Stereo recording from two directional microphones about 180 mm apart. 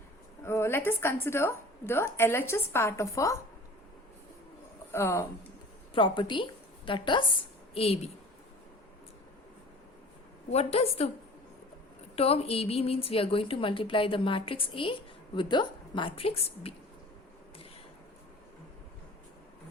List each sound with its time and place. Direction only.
0.4 s a woman's voice: 15° left (ahead or behind)
4.9 s a woman's voice: 15° left (ahead or behind)
5.9 s a woman's voice: 25° left (ahead or behind)
10.5 s a woman's voice: 35° left (ahead or behind)
12.1 s a woman's voice: 35° left (ahead or behind)